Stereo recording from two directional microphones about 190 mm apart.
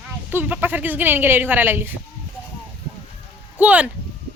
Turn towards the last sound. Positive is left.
turn(degrees=-10)  # may be behind; listen again after turning